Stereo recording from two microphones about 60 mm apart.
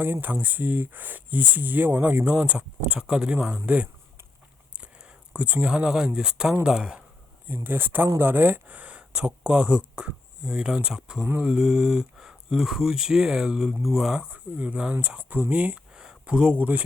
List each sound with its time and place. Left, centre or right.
0.0 s speech: right
5.3 s speech: right
7.4 s speech: right; by 14.3 s centre
14.3 s speech: right